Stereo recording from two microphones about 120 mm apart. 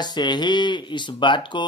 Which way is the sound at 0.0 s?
40° left (ahead or behind).